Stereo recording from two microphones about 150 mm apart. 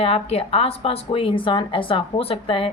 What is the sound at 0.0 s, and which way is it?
A woman's voice, 40° left (ahead or behind).